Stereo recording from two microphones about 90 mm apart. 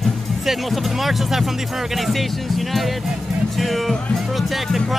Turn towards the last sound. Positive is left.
turn(degrees=0)  # may be behind; listen again after turning